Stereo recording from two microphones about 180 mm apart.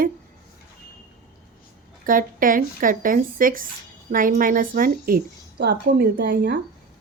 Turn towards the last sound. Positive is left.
turn(degrees=-65)  # may be behind; listen again after turning